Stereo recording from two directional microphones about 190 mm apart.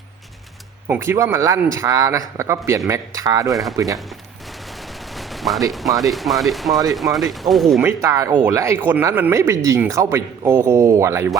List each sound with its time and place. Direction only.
0.9 s speech: 15° right (ahead or behind)
3.5 s speech: centre (ahead or behind)
5.1 s gunshot: centre (ahead or behind)
5.7 s speech: centre (ahead or behind)
7.9 s speech: 15° right (ahead or behind)